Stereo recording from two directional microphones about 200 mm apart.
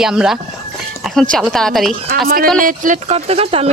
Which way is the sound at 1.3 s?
Centre (ahead or behind).